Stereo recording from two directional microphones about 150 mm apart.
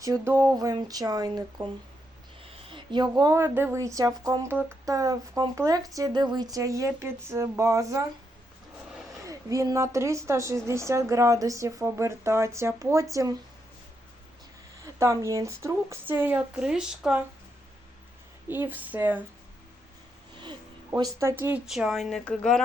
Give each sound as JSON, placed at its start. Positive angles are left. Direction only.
{"t": 0.0, "sound": "a woman's voice", "side_deg": -20}
{"t": 2.4, "sound": "a woman's voice", "side_deg": -35}
{"t": 9.2, "sound": "a woman's voice", "side_deg": -20}
{"t": 14.9, "sound": "speech", "side_deg": -20}
{"t": 18.4, "sound": "speech", "side_deg": -15}
{"t": 20.4, "sound": "a woman's voice", "side_deg": -30}
{"t": 21.7, "sound": "speech", "side_deg": 0}